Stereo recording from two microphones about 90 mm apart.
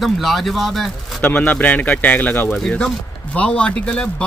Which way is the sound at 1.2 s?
15° left (ahead or behind).